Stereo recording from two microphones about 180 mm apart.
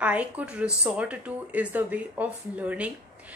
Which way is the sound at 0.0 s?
10° right (ahead or behind).